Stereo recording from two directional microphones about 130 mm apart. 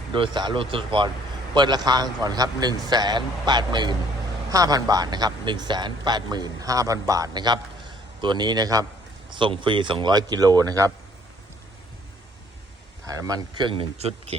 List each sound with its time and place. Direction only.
0.1 s speech: 35° right (ahead or behind)
9.3 s speech: 40° right (ahead or behind)
13.1 s speech: 25° right (ahead or behind); by 14.3 s 45° right (ahead or behind)